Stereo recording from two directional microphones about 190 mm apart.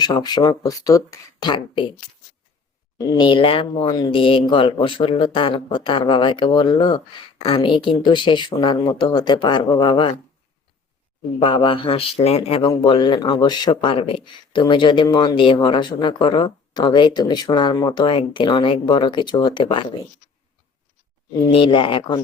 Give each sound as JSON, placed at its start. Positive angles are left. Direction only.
{"t": 0.0, "sound": "speech", "side_deg": 20}
{"t": 3.0, "sound": "speech", "side_deg": 25}
{"t": 11.3, "sound": "speech", "side_deg": 30}
{"t": 21.5, "sound": "speech", "side_deg": 25}